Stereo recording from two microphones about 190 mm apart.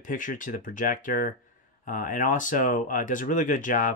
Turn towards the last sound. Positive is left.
turn(degrees=45)  # may be behind; listen again after turning